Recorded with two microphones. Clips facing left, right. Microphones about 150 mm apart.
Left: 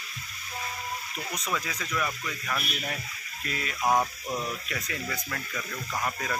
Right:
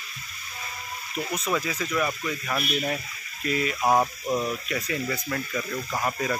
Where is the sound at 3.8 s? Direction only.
25° right (ahead or behind).